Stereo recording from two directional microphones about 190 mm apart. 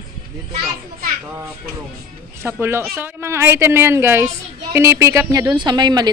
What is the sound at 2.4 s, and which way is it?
Speech, 10° right (ahead or behind).